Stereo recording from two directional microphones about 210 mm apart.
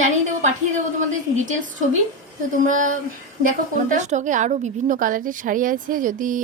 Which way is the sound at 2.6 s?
40° right (ahead or behind).